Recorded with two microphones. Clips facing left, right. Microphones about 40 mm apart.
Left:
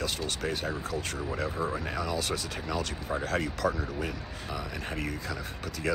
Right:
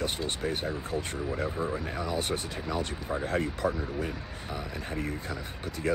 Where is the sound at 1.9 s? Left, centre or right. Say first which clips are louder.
Even; left.